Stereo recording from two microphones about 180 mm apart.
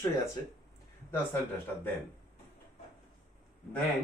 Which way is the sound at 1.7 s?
10° left (ahead or behind).